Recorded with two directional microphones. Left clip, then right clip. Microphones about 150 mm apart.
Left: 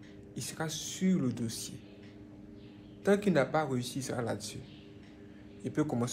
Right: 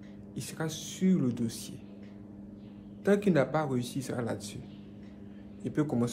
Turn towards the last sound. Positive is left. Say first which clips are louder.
# right 2 dB
turn(degrees=-20)  # may be behind; listen again after turning